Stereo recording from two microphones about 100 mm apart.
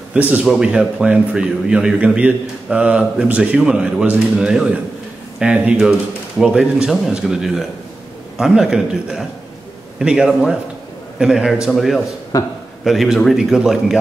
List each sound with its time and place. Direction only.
0.1 s speech: 15° right (ahead or behind)
0.4 s a man's voice: 5° right (ahead or behind)
12.3 s a man's voice: 35° left (ahead or behind)
12.8 s a man's voice: centre (ahead or behind)